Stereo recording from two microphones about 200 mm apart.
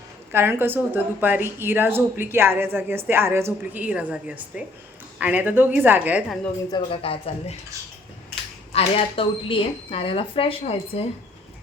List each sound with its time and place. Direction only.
0.3 s a woman's voice: 10° right (ahead or behind)
6.7 s speech: 25° left (ahead or behind)
8.7 s speech: 30° left (ahead or behind)